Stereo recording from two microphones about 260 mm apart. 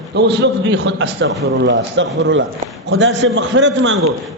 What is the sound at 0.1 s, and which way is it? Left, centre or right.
A man's voice, right.